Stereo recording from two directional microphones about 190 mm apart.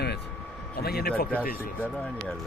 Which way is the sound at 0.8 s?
55° left (ahead or behind).